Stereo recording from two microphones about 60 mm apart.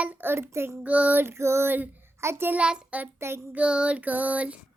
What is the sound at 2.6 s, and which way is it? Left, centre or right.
Child singing, centre.